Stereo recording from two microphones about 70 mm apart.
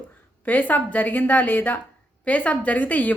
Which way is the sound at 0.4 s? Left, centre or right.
Left.